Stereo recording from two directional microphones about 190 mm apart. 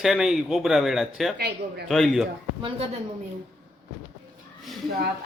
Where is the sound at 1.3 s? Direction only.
60° right (ahead or behind).